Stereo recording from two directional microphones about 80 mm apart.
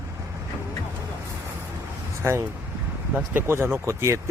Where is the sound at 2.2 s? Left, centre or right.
Right.